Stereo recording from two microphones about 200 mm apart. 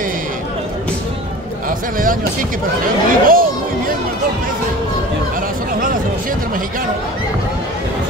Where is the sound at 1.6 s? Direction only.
45° right (ahead or behind).